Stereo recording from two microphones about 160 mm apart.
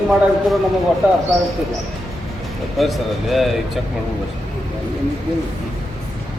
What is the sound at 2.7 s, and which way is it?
Speech, centre (ahead or behind).